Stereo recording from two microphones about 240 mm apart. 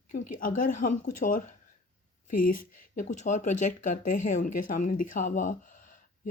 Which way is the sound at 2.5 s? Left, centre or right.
Left.